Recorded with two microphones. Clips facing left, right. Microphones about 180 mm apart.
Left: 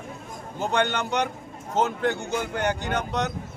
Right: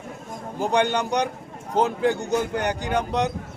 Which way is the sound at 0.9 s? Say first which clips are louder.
Right 3 dB; 35° right (ahead or behind).